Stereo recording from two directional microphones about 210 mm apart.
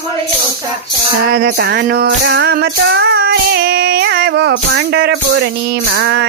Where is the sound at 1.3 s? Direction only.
50° right (ahead or behind).